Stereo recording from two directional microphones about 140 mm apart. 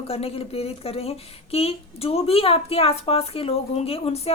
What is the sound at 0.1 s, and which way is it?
Speech, 45° left (ahead or behind).